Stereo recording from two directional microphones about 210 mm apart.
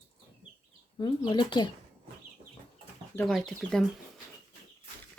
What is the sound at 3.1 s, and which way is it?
Speech, centre (ahead or behind).